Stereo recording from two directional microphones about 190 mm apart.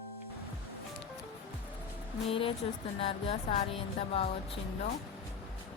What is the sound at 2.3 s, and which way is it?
A woman's voice, 30° left (ahead or behind).